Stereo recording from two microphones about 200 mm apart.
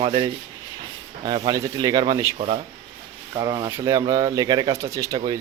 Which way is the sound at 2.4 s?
30° right (ahead or behind).